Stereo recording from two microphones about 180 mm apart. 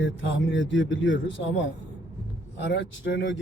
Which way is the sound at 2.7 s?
80° left.